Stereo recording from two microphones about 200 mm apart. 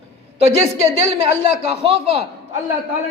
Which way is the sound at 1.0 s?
30° right (ahead or behind).